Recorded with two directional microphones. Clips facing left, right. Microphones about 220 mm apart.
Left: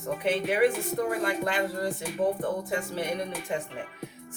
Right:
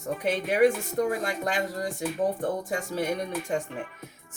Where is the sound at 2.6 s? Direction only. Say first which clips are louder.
Even; 45° right (ahead or behind).